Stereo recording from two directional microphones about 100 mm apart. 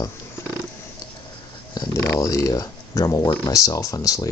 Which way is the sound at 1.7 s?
40° left (ahead or behind).